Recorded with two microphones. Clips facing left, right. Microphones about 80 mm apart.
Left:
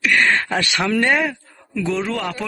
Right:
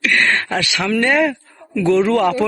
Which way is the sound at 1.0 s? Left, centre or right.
Centre.